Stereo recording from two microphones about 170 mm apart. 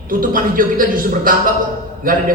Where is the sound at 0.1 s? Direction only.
55° right (ahead or behind).